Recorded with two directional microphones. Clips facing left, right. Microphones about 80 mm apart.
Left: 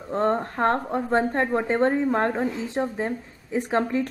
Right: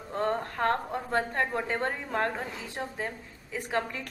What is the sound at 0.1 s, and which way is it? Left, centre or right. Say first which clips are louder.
Speech: left 6 dB; left.